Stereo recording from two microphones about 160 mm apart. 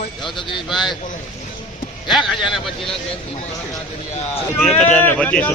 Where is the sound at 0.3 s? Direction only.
30° left (ahead or behind).